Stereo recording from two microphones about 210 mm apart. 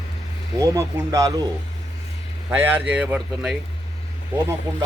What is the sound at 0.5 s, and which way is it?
Speech, 15° right (ahead or behind).